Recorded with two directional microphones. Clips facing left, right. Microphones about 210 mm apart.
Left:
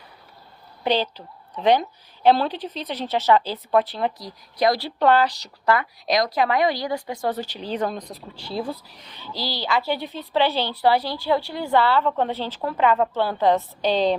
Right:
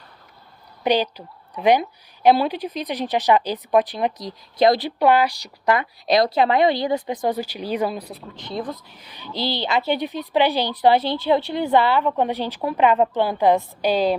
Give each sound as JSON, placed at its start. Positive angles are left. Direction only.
{"t": 0.9, "sound": "a woman's voice", "side_deg": -15}
{"t": 4.9, "sound": "a woman's voice", "side_deg": -10}
{"t": 8.4, "sound": "speech", "side_deg": 10}
{"t": 9.1, "sound": "a woman's voice", "side_deg": -20}